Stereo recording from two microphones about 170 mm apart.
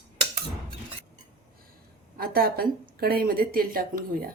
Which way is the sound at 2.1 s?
60° right (ahead or behind).